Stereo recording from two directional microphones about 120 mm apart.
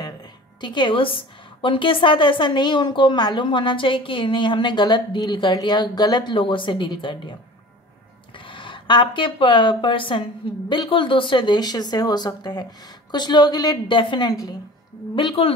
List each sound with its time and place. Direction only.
0.6 s a woman's voice: 40° left (ahead or behind)
8.5 s a woman's voice: 45° left (ahead or behind)
15.1 s a woman's voice: 50° left (ahead or behind)